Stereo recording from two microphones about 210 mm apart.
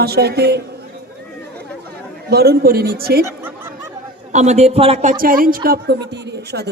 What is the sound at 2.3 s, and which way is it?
Speech, 50° right (ahead or behind).